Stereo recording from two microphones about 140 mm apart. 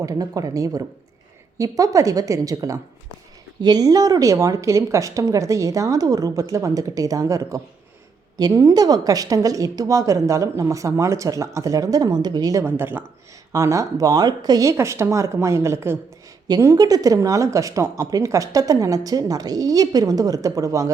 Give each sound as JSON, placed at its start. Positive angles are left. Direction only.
{"t": 0.0, "sound": "speech", "side_deg": -25}
{"t": 12.6, "sound": "speech", "side_deg": -15}